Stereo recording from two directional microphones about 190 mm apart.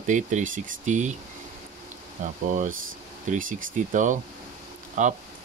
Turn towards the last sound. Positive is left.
turn(degrees=-40)  # may be behind; listen again after turning